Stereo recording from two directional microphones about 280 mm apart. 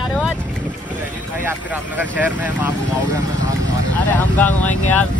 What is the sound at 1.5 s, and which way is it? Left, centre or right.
Speech, centre.